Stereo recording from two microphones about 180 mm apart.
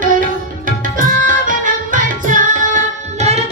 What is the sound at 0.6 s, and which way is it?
Tabla, 45° right (ahead or behind).